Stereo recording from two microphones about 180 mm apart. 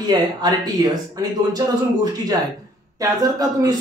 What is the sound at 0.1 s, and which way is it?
Speech, 20° right (ahead or behind).